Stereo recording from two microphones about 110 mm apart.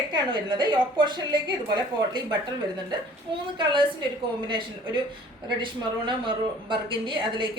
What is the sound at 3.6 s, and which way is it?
Speech, 45° right (ahead or behind).